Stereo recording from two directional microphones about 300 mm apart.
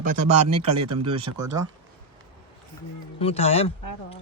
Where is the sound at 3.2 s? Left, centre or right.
Centre.